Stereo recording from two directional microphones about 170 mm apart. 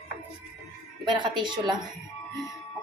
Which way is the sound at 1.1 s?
25° right (ahead or behind).